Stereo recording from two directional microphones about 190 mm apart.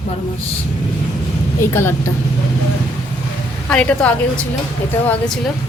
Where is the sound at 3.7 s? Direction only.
5° left (ahead or behind).